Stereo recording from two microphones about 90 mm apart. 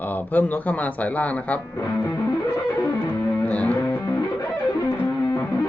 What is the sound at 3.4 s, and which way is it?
Music, 15° left (ahead or behind).